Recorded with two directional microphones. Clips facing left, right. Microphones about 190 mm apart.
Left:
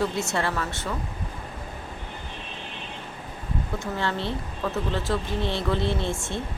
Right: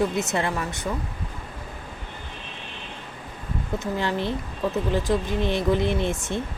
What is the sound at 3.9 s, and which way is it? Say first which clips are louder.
Speech: right 2 dB; 15° right (ahead or behind).